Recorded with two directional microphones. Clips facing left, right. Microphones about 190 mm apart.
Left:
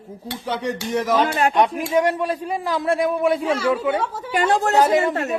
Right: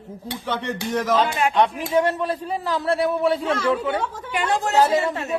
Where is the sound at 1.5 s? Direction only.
10° left (ahead or behind).